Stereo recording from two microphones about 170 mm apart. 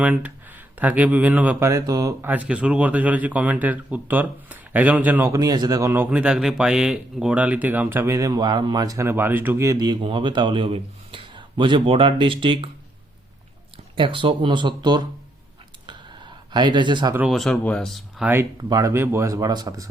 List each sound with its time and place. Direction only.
0.0 s speech: 10° right (ahead or behind)
5.9 s speech: 10° right (ahead or behind); by 12.7 s 30° right (ahead or behind)
13.9 s speech: 30° right (ahead or behind)
15.9 s a sound: 25° right (ahead or behind)
17.2 s speech: centre (ahead or behind)
18.5 s speech: 20° right (ahead or behind)